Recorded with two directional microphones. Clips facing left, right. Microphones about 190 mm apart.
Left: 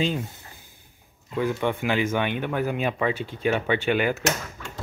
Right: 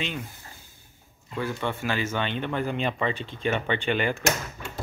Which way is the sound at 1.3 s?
15° left (ahead or behind).